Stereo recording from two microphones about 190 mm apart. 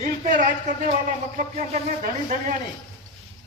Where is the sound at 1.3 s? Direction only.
45° right (ahead or behind).